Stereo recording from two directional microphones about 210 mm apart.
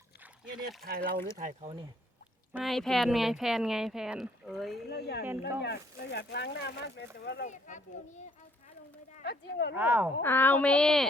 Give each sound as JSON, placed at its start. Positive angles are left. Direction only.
{"t": 0.9, "sound": "speech", "side_deg": -45}
{"t": 2.5, "sound": "speech", "side_deg": 0}
{"t": 4.9, "sound": "speech", "side_deg": 50}
{"t": 7.4, "sound": "a child's voice", "side_deg": 35}
{"t": 9.2, "sound": "speech", "side_deg": 50}
{"t": 9.7, "sound": "speech", "side_deg": -10}
{"t": 10.2, "sound": "speech", "side_deg": 10}